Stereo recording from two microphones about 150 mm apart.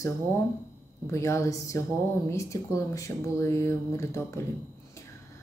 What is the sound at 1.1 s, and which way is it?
A woman's voice, 20° left (ahead or behind).